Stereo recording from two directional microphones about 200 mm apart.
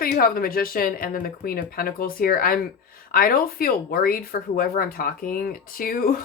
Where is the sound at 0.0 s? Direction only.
45° left (ahead or behind).